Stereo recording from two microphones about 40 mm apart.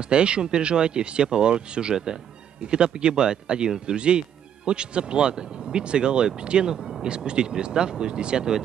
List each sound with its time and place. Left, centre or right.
0.0 s speech: right
6.8 s a sound: centre
7.1 s speech: right